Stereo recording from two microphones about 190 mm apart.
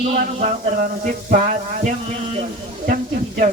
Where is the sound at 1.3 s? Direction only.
40° right (ahead or behind).